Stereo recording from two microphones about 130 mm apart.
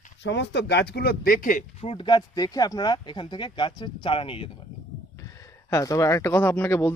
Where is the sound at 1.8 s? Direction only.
45° left (ahead or behind).